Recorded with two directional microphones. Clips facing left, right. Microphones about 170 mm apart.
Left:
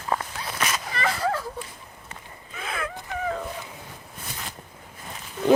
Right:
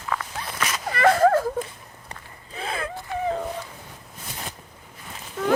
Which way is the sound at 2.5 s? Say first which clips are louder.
Right 2 dB; 30° right (ahead or behind).